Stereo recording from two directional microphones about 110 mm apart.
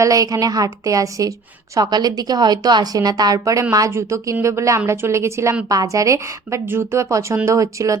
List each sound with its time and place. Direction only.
0.0 s a woman's voice: 30° right (ahead or behind)